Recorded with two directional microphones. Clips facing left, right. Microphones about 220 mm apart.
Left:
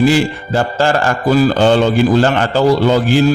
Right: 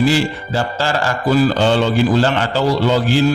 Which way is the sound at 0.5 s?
50° left (ahead or behind).